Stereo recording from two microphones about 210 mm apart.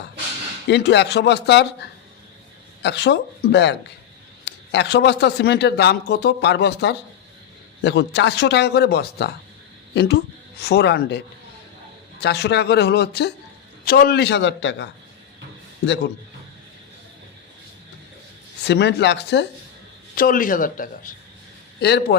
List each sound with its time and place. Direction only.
0.7 s speech: 55° left (ahead or behind)
2.8 s speech: 55° left (ahead or behind)
12.2 s speech: 50° left (ahead or behind)
18.7 s speech: 55° left (ahead or behind)
20.1 s speech: 40° left (ahead or behind)
21.8 s speech: 50° left (ahead or behind)